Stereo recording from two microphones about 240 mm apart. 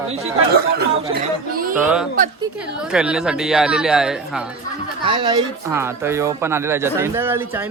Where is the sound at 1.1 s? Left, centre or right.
Right.